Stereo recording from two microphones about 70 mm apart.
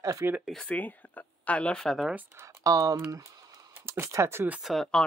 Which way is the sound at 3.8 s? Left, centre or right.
Right.